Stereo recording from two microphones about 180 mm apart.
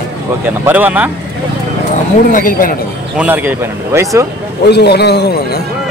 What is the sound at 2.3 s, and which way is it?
Speech, 50° left (ahead or behind).